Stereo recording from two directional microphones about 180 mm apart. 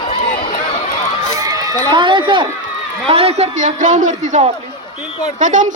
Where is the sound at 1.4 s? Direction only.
20° right (ahead or behind).